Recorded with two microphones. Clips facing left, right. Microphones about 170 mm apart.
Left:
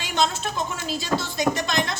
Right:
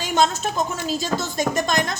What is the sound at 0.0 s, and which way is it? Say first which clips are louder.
A woman's voice: right 4 dB; 45° right (ahead or behind).